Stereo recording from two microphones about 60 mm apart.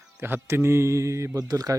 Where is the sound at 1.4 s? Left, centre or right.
Right.